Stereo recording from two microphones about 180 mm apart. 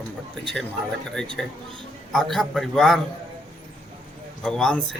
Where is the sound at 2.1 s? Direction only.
Centre (ahead or behind).